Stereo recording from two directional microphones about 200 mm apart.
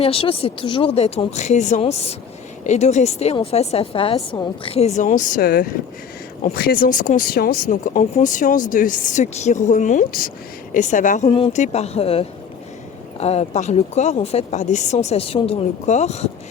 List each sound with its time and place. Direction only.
0.0 s speech: 25° left (ahead or behind)
11.3 s speech: 25° left (ahead or behind)